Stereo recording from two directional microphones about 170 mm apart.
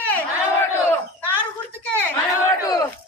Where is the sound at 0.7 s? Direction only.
15° left (ahead or behind).